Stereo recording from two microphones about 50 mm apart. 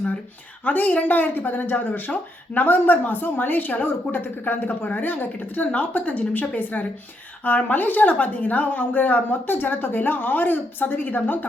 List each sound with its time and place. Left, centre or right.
0.6 s speech: left